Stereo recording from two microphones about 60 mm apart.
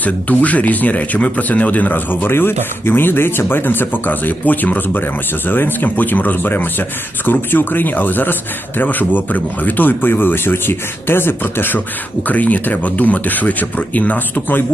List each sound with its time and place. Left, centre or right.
0.0 s speech: left
12.3 s speech: left